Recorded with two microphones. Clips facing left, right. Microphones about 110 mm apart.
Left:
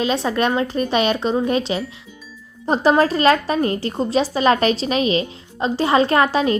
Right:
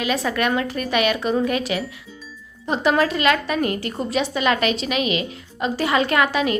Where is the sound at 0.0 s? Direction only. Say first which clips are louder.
Left 3 dB; 30° left (ahead or behind).